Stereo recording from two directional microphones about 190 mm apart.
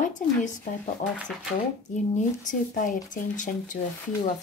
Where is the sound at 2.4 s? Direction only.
45° left (ahead or behind).